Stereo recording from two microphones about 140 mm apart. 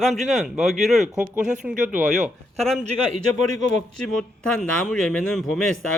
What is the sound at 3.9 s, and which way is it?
A man's voice, 5° left (ahead or behind).